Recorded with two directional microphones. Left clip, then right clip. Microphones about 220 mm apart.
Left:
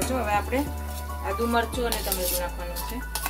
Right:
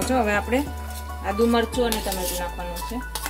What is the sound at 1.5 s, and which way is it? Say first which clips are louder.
Speech: right 3 dB; 50° right (ahead or behind).